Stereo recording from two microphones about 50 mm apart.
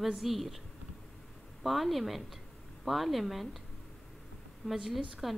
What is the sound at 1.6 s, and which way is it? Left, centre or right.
A woman's voice, centre.